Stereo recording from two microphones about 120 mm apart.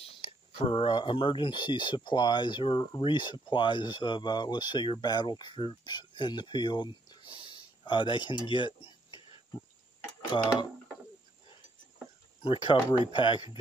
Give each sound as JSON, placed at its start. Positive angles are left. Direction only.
{"t": 0.0, "sound": "speech", "side_deg": 50}
{"t": 12.4, "sound": "speech", "side_deg": 45}